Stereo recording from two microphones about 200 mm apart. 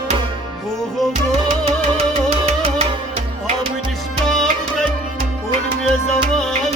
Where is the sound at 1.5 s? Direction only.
30° right (ahead or behind).